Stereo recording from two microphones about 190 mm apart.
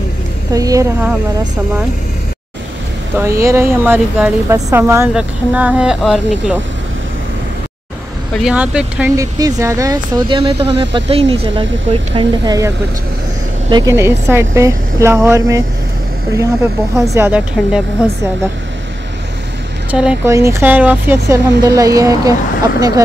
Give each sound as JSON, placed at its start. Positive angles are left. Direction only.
{"t": 0.5, "sound": "speech", "side_deg": -20}
{"t": 3.2, "sound": "speech", "side_deg": -15}
{"t": 8.4, "sound": "speech", "side_deg": -5}
{"t": 9.1, "sound": "speech", "side_deg": -15}
{"t": 13.7, "sound": "speech", "side_deg": -20}
{"t": 17.0, "sound": "speech", "side_deg": -15}
{"t": 19.9, "sound": "speech", "side_deg": -5}